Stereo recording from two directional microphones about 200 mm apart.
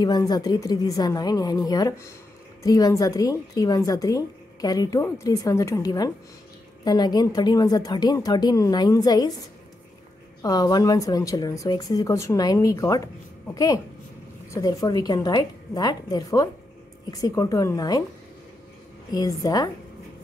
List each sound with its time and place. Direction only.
0.0 s a woman's voice: 20° left (ahead or behind)
10.4 s a woman's voice: 20° left (ahead or behind)
14.5 s a woman's voice: 15° left (ahead or behind)
19.1 s speech: 20° left (ahead or behind)